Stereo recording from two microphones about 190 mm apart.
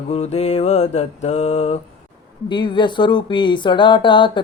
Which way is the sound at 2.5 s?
25° left (ahead or behind).